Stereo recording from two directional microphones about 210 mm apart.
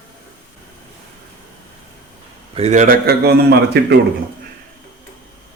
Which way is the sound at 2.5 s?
30° right (ahead or behind).